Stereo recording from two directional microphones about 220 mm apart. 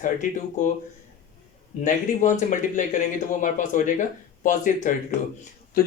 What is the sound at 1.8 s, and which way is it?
Speech, 35° left (ahead or behind).